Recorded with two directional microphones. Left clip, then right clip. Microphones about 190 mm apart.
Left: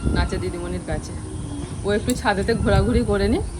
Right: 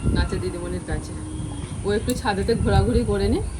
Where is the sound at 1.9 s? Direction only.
Centre (ahead or behind).